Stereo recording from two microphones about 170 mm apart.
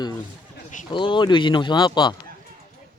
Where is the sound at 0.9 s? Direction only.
30° left (ahead or behind).